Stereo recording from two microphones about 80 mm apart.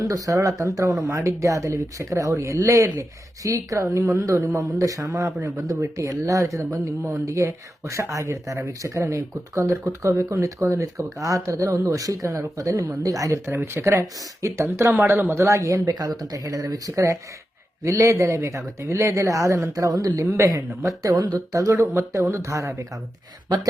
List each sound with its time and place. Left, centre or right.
0.0 s speech: right
13.5 s speech: right
13.8 s speech: right